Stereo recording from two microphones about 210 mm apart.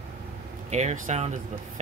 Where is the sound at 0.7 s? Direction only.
35° right (ahead or behind).